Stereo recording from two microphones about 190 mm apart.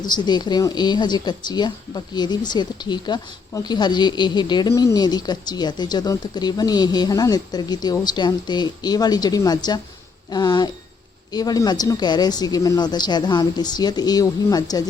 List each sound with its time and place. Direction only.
0.0 s a woman's voice: 20° left (ahead or behind)